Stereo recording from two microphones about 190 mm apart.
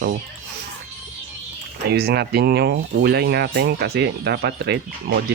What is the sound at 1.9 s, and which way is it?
Speech, 55° right (ahead or behind).